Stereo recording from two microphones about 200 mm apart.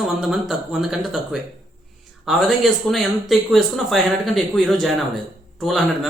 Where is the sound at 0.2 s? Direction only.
5° right (ahead or behind).